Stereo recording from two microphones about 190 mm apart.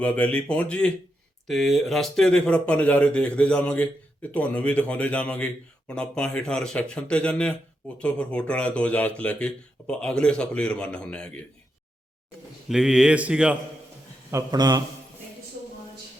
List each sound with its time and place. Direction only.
0.0 s speech: 5° left (ahead or behind)
12.6 s speech: 5° right (ahead or behind)
14.3 s a man's voice: 20° right (ahead or behind)